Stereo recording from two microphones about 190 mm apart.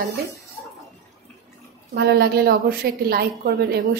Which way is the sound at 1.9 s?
55° right (ahead or behind).